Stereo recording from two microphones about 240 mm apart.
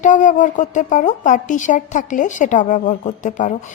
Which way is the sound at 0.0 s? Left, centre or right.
Left.